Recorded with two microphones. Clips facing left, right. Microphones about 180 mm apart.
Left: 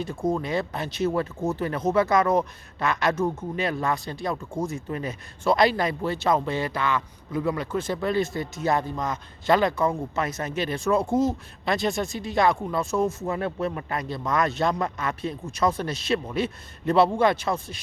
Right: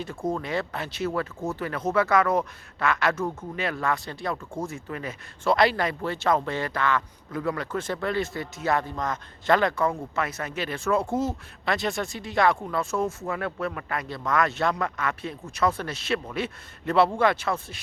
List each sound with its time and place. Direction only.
0.0 s speech: 15° left (ahead or behind)
4.7 s speech: 30° left (ahead or behind)
5.4 s speech: 15° left (ahead or behind); by 14.6 s 35° left (ahead or behind)
14.6 s speech: 20° left (ahead or behind)
15.2 s speech: 40° left (ahead or behind)
15.6 s speech: 15° left (ahead or behind)